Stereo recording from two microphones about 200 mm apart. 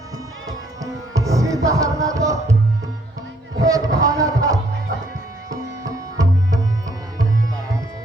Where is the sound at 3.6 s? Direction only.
15° right (ahead or behind).